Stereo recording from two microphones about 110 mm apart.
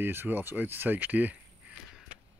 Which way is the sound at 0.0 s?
20° right (ahead or behind).